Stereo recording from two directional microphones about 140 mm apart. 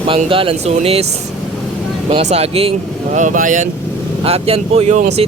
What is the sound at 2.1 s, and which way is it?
Speech, 50° right (ahead or behind).